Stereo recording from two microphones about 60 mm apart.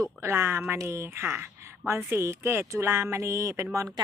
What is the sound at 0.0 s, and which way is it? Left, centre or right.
Speech, right.